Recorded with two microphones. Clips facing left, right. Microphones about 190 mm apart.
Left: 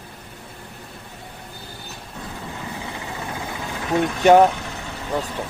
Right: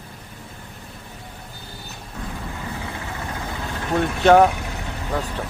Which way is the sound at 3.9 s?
Centre (ahead or behind).